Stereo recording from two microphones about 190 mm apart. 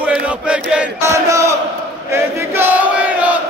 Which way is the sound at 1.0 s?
15° right (ahead or behind).